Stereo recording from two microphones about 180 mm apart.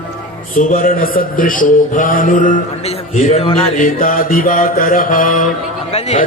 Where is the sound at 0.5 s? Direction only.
50° left (ahead or behind).